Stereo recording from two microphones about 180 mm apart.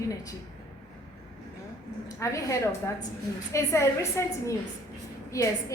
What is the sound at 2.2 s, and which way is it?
A woman's voice, 15° left (ahead or behind).